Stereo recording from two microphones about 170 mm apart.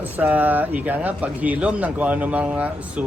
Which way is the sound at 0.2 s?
10° right (ahead or behind).